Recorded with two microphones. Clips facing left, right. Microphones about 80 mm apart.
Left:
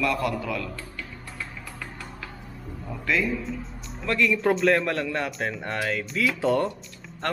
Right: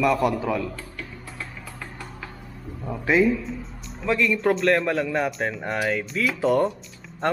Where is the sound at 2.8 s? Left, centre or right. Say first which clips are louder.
Right 6 dB; right.